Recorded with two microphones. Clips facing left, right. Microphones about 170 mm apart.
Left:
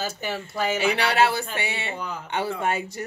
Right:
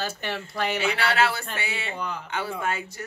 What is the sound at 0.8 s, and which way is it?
Speech, 25° left (ahead or behind).